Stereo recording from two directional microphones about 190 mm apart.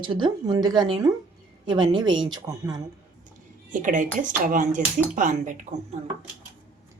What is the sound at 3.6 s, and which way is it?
Speech, 45° right (ahead or behind).